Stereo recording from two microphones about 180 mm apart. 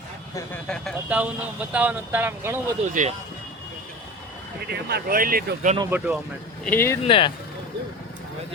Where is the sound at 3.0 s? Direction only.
45° right (ahead or behind).